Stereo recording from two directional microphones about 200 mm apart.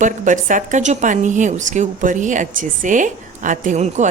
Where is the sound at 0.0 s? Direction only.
40° right (ahead or behind).